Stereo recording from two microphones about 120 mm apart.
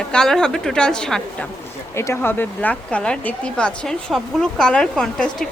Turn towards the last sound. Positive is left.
turn(degrees=5)  # may be behind; listen again after turning